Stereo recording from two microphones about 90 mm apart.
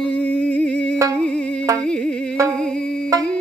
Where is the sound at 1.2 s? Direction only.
10° left (ahead or behind).